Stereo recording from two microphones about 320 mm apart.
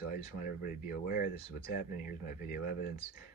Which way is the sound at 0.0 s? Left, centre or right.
Left.